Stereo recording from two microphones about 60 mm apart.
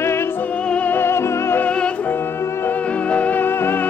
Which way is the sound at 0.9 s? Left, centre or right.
Left.